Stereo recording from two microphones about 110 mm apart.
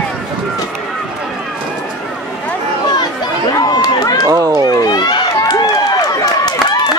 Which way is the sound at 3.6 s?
40° left (ahead or behind).